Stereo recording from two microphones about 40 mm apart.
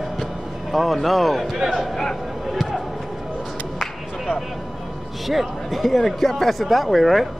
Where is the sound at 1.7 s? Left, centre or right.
Centre.